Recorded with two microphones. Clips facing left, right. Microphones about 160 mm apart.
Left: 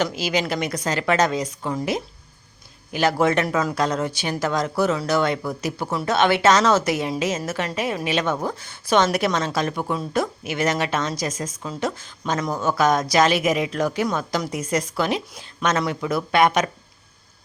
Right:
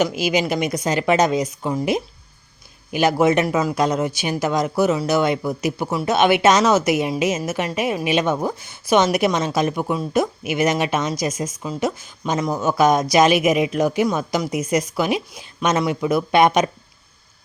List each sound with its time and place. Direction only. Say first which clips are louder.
0.0 s speech: right 4 dB; 15° right (ahead or behind)